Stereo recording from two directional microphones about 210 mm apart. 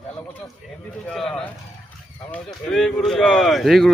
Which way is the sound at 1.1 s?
5° left (ahead or behind).